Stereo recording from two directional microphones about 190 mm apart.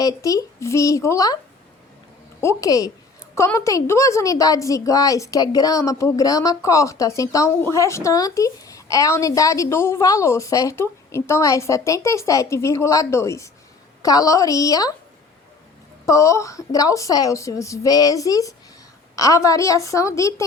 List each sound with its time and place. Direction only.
0.0 s a woman's voice: 20° left (ahead or behind)
2.4 s a woman's voice: 15° left (ahead or behind)
16.0 s a woman's voice: 15° left (ahead or behind)